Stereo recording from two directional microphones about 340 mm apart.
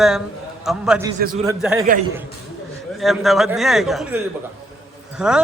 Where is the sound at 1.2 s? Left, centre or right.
Right.